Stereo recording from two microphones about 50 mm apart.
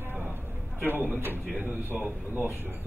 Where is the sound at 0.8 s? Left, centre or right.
Right.